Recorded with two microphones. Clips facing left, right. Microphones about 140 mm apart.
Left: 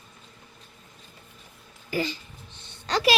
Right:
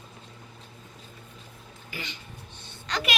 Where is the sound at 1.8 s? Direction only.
35° left (ahead or behind).